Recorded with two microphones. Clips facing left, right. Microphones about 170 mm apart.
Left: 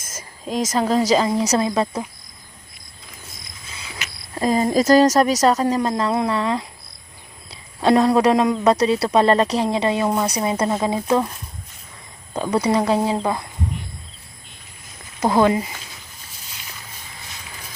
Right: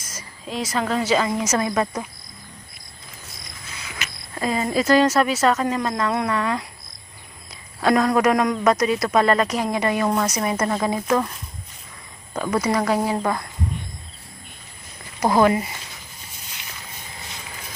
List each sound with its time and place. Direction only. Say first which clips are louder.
0.0 s a woman's voice: left 3 dB; 50° left (ahead or behind); by 1.9 s 25° left (ahead or behind)
4.4 s a woman's voice: left 4 dB; 35° left (ahead or behind)
7.8 s a woman's voice: left 3 dB; 30° left (ahead or behind)
10.6 s speech: left 2 dB; 15° left (ahead or behind)
12.3 s a woman's voice: left 3 dB; 15° left (ahead or behind)
15.4 s a woman's voice: left 1 dB; 20° left (ahead or behind)